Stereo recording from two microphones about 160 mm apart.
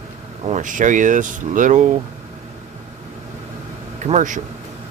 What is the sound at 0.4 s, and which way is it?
Speech, 50° right (ahead or behind).